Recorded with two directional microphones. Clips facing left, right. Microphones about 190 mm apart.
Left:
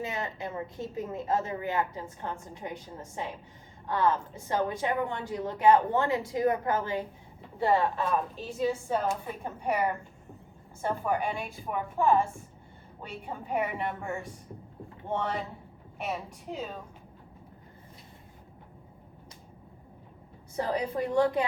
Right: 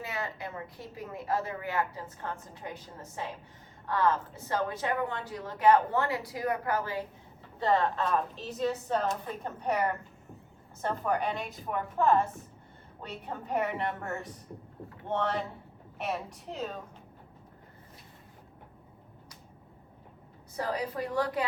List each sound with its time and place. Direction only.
0.0 s a woman's voice: 20° left (ahead or behind)
7.6 s a woman's voice: 10° left (ahead or behind)
20.6 s a woman's voice: 25° left (ahead or behind)